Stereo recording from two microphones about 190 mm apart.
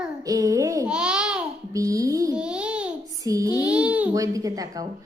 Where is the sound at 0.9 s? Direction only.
5° right (ahead or behind).